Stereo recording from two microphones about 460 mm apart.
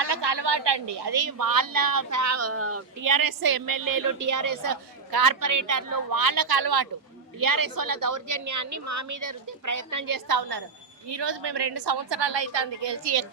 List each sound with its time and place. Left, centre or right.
0.0 s a woman's voice: right
3.0 s a woman's voice: right
11.0 s a woman's voice: right